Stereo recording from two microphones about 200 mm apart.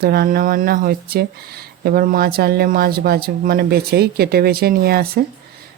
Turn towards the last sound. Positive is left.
turn(degrees=-50)  # may be behind; listen again after turning